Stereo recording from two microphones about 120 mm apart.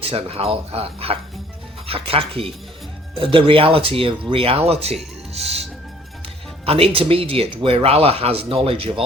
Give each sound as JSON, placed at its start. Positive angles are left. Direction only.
{"t": 0.0, "sound": "speech", "side_deg": -55}
{"t": 5.3, "sound": "music", "side_deg": -60}
{"t": 6.7, "sound": "speech", "side_deg": -55}